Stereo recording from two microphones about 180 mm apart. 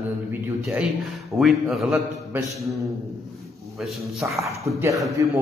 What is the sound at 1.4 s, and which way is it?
A man's voice, centre (ahead or behind).